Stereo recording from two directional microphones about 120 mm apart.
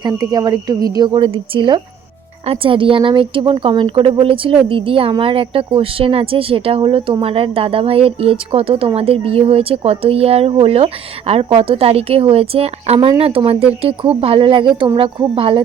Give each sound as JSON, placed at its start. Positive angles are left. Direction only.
{"t": 0.0, "sound": "a woman's voice", "side_deg": -35}